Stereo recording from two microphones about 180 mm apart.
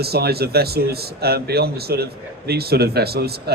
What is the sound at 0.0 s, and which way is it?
Speech, 60° right (ahead or behind).